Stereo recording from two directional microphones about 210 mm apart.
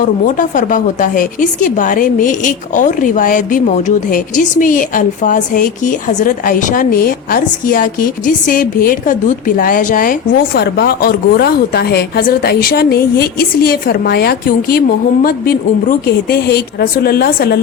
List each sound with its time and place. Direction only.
0.3 s a woman's voice: 40° left (ahead or behind)